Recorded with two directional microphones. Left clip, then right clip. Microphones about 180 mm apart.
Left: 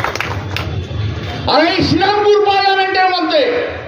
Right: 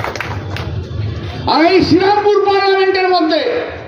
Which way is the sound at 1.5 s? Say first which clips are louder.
Right 2 dB; 40° right (ahead or behind).